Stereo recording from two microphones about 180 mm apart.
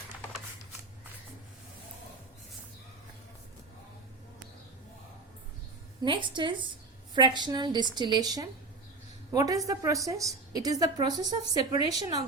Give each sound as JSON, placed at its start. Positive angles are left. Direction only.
{"t": 6.0, "sound": "a woman's voice", "side_deg": -25}